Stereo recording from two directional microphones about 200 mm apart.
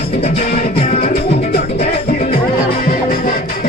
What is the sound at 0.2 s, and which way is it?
Music, 35° left (ahead or behind).